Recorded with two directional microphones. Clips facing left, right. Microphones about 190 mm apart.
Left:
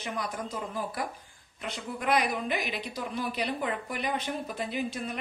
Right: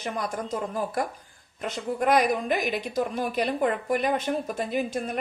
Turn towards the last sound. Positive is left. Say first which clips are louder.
# right 5 dB
turn(degrees=-45)  # may be behind; listen again after turning